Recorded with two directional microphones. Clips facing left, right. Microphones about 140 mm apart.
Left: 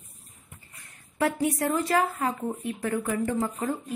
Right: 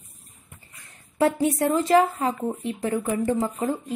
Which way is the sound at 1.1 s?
25° right (ahead or behind).